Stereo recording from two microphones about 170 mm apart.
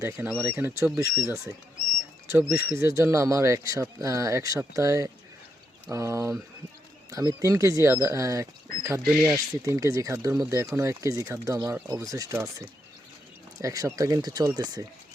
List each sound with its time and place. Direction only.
0.0 s speech: 15° right (ahead or behind)
9.0 s speech: 5° right (ahead or behind)
9.6 s speech: 20° right (ahead or behind)